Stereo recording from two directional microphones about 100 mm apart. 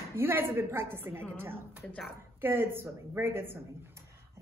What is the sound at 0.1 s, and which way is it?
A woman's voice, 20° right (ahead or behind).